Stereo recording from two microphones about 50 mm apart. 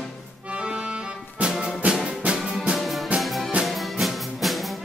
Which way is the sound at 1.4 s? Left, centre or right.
Right.